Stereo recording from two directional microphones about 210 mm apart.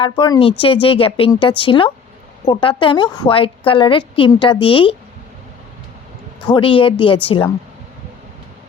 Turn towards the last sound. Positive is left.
turn(degrees=25)  # may be behind; listen again after turning